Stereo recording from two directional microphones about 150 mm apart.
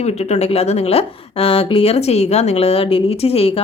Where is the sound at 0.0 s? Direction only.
45° left (ahead or behind).